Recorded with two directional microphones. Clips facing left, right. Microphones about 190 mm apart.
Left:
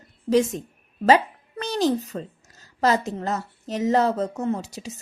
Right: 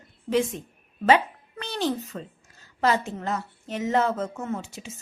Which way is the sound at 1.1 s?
40° left (ahead or behind).